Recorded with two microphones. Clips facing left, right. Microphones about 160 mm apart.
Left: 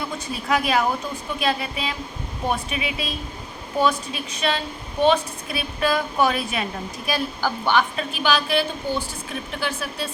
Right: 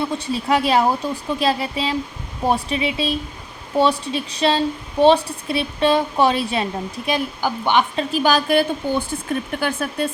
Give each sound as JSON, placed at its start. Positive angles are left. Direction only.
{"t": 0.0, "sound": "a woman's voice", "side_deg": -30}
{"t": 8.1, "sound": "a woman's voice", "side_deg": -45}